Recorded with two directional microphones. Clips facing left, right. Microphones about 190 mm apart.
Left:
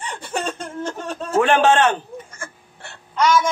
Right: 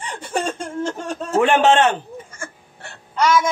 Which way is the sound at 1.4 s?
20° right (ahead or behind).